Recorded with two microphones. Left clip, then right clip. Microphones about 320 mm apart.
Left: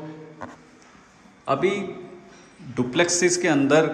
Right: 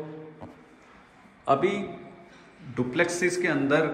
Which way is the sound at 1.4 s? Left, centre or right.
Centre.